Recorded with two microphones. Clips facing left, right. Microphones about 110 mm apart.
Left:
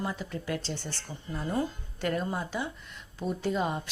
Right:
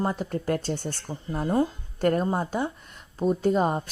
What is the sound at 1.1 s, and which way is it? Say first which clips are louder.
Speech: right 6 dB; 35° right (ahead or behind).